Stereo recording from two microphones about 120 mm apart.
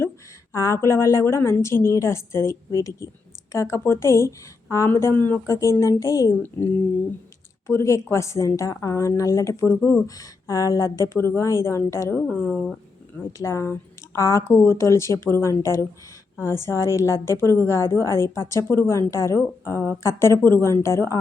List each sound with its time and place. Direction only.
0.5 s a woman's voice: 25° left (ahead or behind)
5.8 s a woman's voice: 25° left (ahead or behind)
6.4 s a woman's voice: 15° left (ahead or behind)
12.3 s speech: 10° left (ahead or behind)
13.4 s a woman's voice: 25° left (ahead or behind)